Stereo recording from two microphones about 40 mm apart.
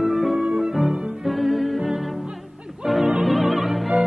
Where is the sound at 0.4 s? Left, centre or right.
Centre.